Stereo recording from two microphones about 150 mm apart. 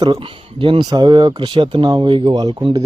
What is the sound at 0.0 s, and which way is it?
Speech, 35° right (ahead or behind).